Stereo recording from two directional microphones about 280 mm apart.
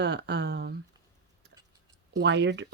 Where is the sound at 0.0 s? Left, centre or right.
Right.